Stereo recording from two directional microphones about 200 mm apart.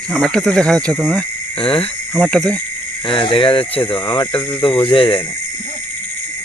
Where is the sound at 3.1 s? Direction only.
25° left (ahead or behind).